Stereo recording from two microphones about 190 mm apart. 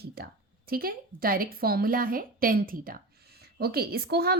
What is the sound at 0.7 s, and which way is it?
A woman's voice, 50° right (ahead or behind).